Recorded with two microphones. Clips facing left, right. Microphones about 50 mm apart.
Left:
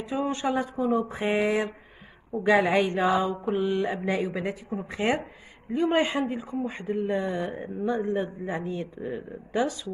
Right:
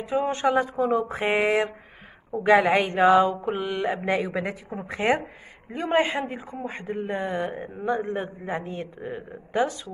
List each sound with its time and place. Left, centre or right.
0.1 s speech: right
5.9 s speech: right